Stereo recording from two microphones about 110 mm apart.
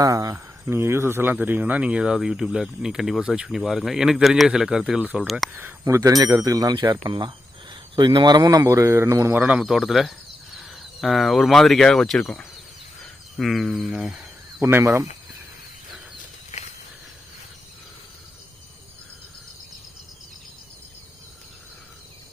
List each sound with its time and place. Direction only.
0.0 s speech: 35° right (ahead or behind); by 5.5 s centre (ahead or behind)
5.5 s speech: 15° right (ahead or behind)
5.8 s speech: 30° right (ahead or behind)
6.9 s speech: 45° right (ahead or behind); by 9.4 s 25° right (ahead or behind)
9.4 s speech: 10° right (ahead or behind)
14.6 s speech: 20° right (ahead or behind)
16.5 s a sound: 90° left